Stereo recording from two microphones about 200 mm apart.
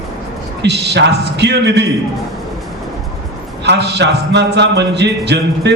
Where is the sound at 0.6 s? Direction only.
60° right (ahead or behind).